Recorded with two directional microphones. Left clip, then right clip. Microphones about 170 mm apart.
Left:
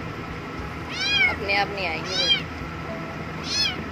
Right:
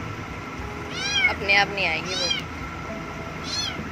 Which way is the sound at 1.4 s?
5° right (ahead or behind).